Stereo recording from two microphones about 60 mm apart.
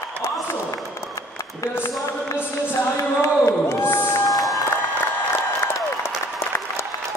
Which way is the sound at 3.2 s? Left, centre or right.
Left.